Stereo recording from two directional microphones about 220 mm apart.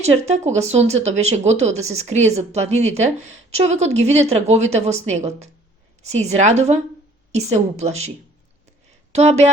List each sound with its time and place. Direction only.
0.0 s a woman's voice: 30° right (ahead or behind)
9.1 s a woman's voice: 30° right (ahead or behind)